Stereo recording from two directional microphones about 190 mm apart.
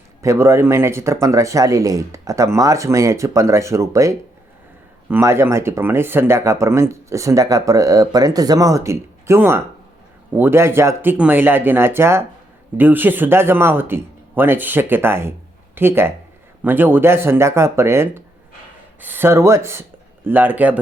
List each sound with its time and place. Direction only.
0.2 s speech: 15° right (ahead or behind)